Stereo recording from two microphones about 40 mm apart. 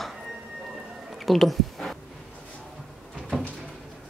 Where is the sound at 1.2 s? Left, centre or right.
Centre.